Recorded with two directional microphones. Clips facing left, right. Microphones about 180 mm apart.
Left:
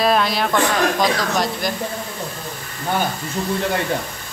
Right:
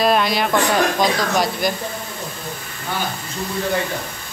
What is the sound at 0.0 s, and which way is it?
Speech, centre (ahead or behind).